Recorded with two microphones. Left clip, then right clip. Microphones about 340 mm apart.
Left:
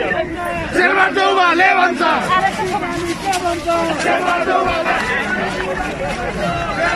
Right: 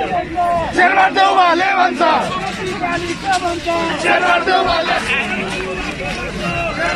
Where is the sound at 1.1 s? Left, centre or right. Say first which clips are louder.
Right 2 dB; centre.